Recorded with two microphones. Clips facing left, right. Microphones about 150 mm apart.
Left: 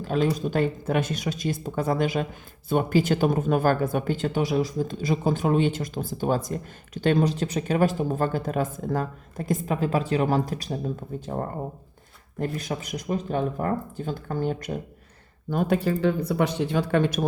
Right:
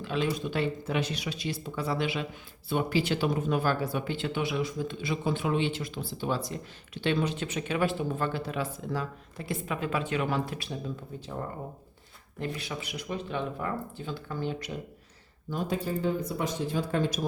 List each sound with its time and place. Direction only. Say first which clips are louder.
0.0 s speech: left 6 dB; 45° left (ahead or behind)
15.4 s speech: left 7 dB; 60° left (ahead or behind)